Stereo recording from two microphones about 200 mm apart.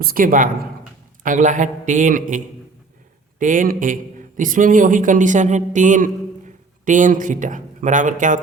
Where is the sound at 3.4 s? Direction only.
40° right (ahead or behind).